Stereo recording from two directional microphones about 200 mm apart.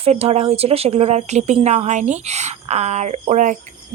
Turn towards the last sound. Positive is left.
turn(degrees=-40)  # may be behind; listen again after turning